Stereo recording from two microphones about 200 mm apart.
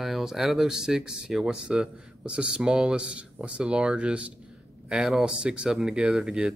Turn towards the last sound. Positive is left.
turn(degrees=-5)  # may be behind; listen again after turning